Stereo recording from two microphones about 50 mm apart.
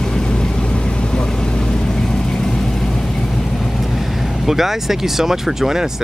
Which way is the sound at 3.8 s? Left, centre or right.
Centre.